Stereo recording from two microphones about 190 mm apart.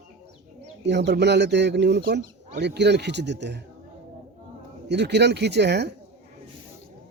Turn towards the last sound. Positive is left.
turn(degrees=-65)  # may be behind; listen again after turning